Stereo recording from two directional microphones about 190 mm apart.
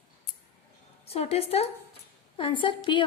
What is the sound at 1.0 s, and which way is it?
A woman's voice, 30° left (ahead or behind).